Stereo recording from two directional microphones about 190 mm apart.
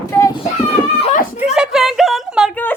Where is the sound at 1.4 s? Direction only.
5° right (ahead or behind).